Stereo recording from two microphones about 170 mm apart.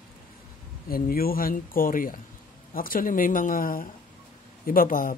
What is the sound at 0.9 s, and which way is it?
Speech, 60° left (ahead or behind).